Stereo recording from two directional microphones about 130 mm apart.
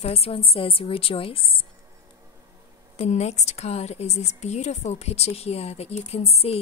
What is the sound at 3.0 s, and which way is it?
A woman's voice, 60° left (ahead or behind).